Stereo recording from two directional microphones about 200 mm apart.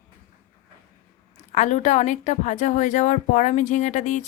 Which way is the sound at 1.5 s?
35° left (ahead or behind).